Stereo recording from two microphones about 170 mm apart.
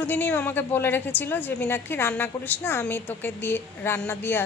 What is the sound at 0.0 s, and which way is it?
A woman's voice, 10° left (ahead or behind).